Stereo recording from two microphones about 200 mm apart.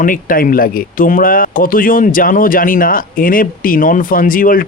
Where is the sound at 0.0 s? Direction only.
45° left (ahead or behind).